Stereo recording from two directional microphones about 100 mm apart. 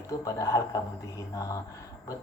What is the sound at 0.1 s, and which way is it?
Speech, 35° left (ahead or behind).